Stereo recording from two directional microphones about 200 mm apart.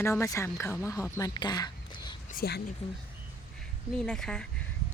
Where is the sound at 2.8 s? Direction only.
30° left (ahead or behind).